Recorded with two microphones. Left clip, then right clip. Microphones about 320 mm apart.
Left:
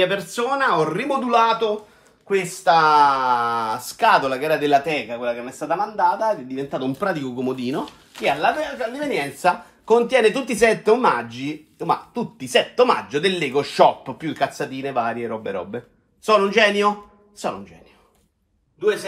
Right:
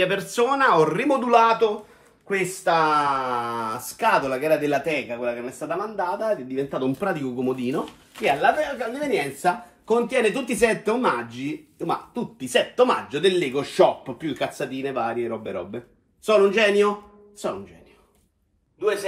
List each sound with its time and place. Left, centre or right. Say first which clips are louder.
0.0 s speech: left 1 dB; centre
3.0 s speech: left 7 dB; left
3.3 s speech: left 5 dB; centre
9.4 s speech: left 4 dB; centre